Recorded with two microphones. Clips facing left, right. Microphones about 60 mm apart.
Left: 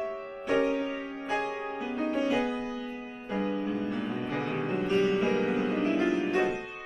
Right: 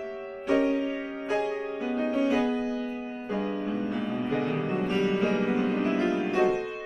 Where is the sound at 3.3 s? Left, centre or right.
Centre.